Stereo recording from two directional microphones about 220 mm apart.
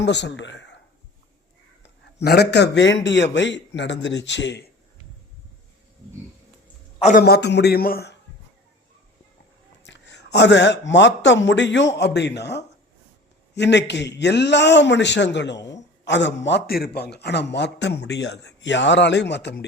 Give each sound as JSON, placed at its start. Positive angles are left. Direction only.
{"t": 0.0, "sound": "a man's voice", "side_deg": 50}
{"t": 2.1, "sound": "a man's voice", "side_deg": 45}
{"t": 7.0, "sound": "a man's voice", "side_deg": 40}
{"t": 9.8, "sound": "a man's voice", "side_deg": 55}